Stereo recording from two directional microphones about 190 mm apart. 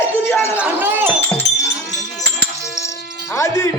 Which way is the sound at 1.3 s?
15° left (ahead or behind).